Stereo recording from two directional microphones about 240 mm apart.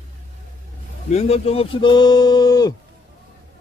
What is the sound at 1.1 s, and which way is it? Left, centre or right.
Speech, left.